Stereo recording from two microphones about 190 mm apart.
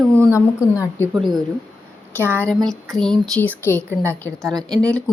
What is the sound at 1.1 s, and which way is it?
Speech, centre (ahead or behind).